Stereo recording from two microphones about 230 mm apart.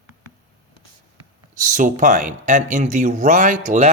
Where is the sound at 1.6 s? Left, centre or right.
Right.